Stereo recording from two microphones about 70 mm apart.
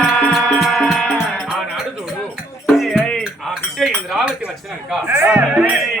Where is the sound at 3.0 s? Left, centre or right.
Centre.